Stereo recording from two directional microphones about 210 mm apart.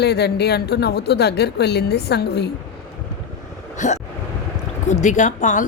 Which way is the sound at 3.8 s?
35° left (ahead or behind).